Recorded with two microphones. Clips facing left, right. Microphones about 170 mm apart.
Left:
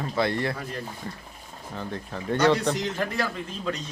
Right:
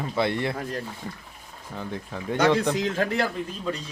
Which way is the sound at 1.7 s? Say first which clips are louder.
Even; 10° right (ahead or behind).